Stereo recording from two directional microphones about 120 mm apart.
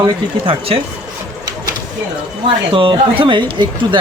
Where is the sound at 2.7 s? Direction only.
45° right (ahead or behind).